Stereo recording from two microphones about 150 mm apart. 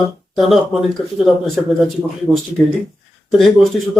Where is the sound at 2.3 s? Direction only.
25° right (ahead or behind).